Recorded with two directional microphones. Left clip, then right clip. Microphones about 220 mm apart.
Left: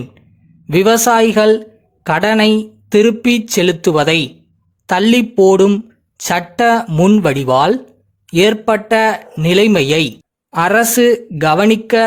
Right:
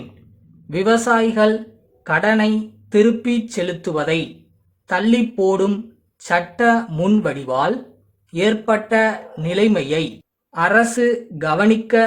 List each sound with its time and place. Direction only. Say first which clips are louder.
0.7 s speech: left 6 dB; 40° left (ahead or behind)